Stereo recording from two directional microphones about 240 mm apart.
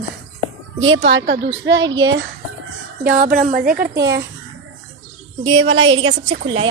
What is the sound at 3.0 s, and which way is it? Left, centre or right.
Speech, right.